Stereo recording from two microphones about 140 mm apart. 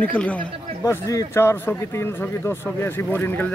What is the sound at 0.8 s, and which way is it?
A man's voice, 20° left (ahead or behind).